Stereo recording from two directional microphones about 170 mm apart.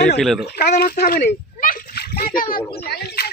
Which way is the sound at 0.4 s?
65° left (ahead or behind).